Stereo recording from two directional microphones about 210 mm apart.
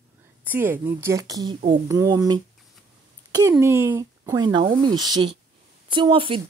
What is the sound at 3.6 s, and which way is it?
A woman's voice, 10° right (ahead or behind).